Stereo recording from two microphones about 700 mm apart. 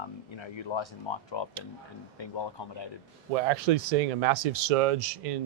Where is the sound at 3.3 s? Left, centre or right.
Right.